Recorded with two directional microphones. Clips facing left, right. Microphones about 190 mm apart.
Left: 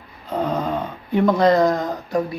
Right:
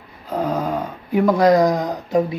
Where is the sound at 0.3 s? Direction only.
5° right (ahead or behind).